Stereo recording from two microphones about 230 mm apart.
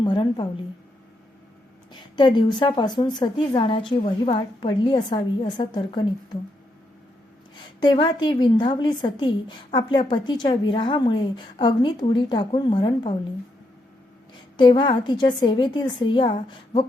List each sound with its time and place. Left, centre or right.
0.0 s a woman's voice: centre
1.9 s a woman's voice: centre
7.5 s a woman's voice: centre
14.5 s a woman's voice: centre